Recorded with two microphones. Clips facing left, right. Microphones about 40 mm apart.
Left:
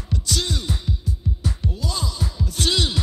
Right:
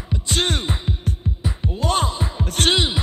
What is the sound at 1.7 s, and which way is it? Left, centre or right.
Music, right.